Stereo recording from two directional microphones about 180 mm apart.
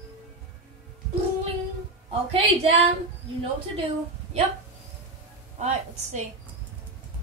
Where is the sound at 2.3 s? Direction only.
35° right (ahead or behind).